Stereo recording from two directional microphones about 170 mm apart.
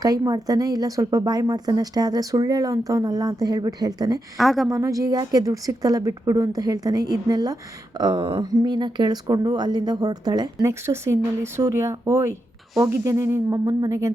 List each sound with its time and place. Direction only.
0.0 s speech: 20° right (ahead or behind)
4.4 s a woman's voice: centre (ahead or behind)
4.7 s speech: 20° right (ahead or behind)